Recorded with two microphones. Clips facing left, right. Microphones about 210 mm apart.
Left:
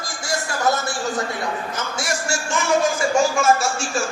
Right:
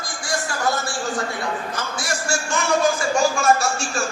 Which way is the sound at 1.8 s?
25° left (ahead or behind).